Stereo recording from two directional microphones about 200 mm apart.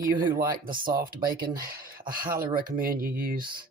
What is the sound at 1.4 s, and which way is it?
Speech, 45° right (ahead or behind).